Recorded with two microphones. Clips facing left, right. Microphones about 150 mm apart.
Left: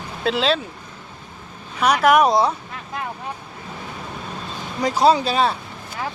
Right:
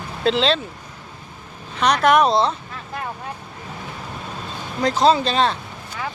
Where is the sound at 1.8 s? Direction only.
5° left (ahead or behind).